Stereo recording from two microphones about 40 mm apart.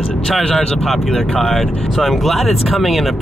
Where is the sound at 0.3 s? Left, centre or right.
Centre.